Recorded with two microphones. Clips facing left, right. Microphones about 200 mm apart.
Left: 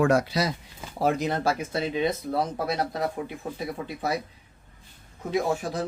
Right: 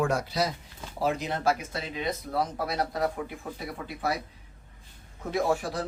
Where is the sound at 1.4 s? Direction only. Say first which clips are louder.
Left 2 dB; 30° left (ahead or behind).